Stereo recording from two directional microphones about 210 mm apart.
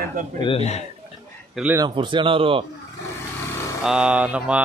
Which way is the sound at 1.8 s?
25° right (ahead or behind).